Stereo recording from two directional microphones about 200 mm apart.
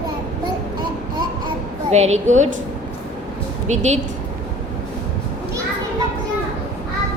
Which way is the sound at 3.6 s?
35° right (ahead or behind).